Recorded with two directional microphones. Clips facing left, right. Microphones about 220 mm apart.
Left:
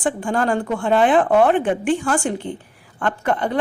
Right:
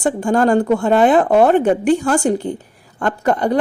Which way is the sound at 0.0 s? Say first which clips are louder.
Right 5 dB; 40° right (ahead or behind).